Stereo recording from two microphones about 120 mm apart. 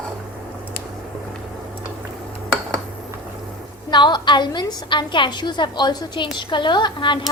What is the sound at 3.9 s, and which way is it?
A woman's voice, 40° left (ahead or behind).